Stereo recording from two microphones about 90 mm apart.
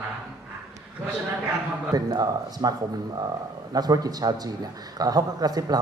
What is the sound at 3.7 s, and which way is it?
A man's voice, 45° right (ahead or behind).